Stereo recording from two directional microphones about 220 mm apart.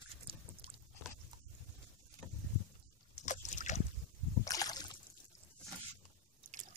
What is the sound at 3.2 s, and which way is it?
Boat, 35° left (ahead or behind).